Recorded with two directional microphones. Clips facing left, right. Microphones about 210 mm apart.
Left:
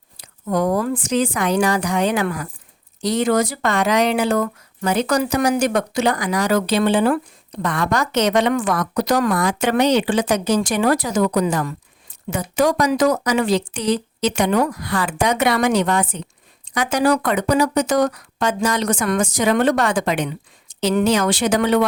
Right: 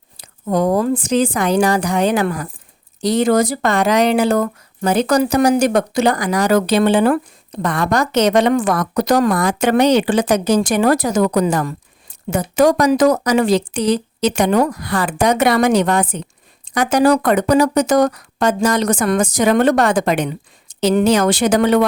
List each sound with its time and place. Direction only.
0.2 s speech: 30° right (ahead or behind); by 7.2 s 55° right (ahead or behind)
7.6 s speech: 35° right (ahead or behind)